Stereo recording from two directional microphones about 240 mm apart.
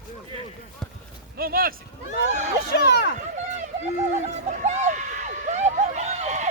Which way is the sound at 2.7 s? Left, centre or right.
Left.